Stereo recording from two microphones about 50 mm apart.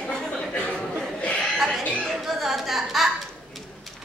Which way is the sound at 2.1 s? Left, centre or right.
Centre.